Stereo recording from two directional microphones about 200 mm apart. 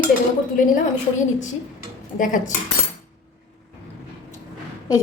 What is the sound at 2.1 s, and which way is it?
Cutlery, 40° left (ahead or behind).